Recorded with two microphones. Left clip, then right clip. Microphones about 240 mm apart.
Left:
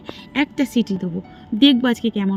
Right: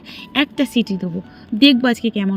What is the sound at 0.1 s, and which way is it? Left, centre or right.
A woman's voice, centre.